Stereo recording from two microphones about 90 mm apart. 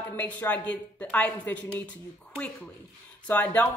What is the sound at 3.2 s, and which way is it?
Speech, 15° left (ahead or behind).